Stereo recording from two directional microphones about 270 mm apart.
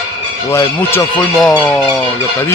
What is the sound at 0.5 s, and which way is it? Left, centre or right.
Speech, centre.